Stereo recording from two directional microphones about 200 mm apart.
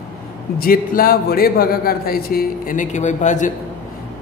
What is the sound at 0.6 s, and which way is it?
A man's voice, 45° left (ahead or behind).